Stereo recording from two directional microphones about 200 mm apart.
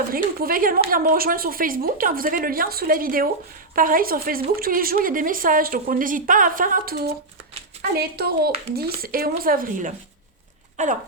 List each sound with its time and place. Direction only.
0.1 s speech: 45° right (ahead or behind)